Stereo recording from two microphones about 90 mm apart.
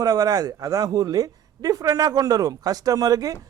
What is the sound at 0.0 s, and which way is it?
Speech, 45° right (ahead or behind).